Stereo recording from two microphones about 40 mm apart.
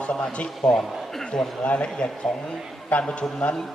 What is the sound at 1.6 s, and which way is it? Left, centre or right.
A man's voice, left.